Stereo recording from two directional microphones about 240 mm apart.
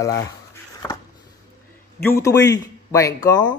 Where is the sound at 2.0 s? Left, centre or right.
Centre.